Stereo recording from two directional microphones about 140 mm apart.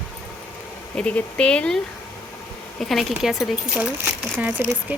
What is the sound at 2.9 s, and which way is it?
Speech, centre (ahead or behind).